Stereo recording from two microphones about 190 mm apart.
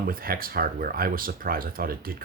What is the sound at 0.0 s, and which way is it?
Speech, 50° right (ahead or behind).